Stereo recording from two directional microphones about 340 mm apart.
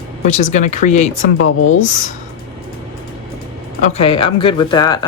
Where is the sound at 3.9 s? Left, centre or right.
Centre.